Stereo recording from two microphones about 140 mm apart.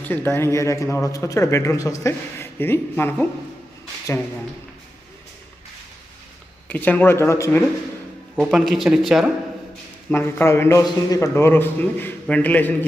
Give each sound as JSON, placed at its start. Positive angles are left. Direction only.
{"t": 0.0, "sound": "speech", "side_deg": 15}
{"t": 6.7, "sound": "a man's voice", "side_deg": 10}
{"t": 8.4, "sound": "a man's voice", "side_deg": 0}
{"t": 10.1, "sound": "a man's voice", "side_deg": 15}